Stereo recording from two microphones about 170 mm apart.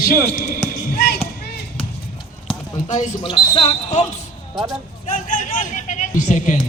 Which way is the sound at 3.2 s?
30° left (ahead or behind).